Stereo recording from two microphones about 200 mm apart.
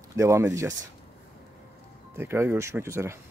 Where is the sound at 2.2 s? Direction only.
10° right (ahead or behind).